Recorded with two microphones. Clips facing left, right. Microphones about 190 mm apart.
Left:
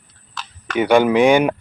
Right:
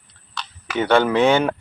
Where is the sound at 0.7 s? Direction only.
10° left (ahead or behind).